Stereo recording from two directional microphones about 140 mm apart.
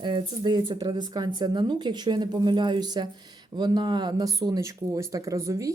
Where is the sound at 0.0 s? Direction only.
35° right (ahead or behind).